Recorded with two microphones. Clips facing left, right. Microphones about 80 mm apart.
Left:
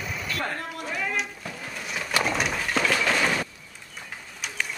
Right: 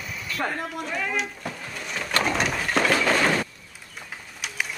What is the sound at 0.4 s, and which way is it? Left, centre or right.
Speech, centre.